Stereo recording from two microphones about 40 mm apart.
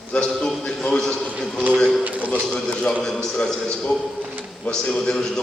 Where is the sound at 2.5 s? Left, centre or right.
Left.